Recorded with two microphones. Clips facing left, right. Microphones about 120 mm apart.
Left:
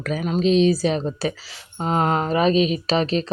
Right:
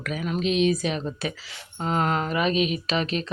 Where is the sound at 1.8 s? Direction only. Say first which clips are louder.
Left 4 dB; 25° left (ahead or behind).